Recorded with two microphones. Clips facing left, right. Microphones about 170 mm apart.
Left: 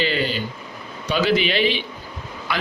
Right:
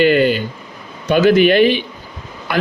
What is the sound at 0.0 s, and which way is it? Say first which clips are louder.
A man's voice: right 10 dB; 55° right (ahead or behind).